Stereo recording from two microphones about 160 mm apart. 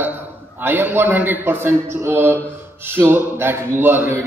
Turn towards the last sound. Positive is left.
turn(degrees=-15)  # may be behind; listen again after turning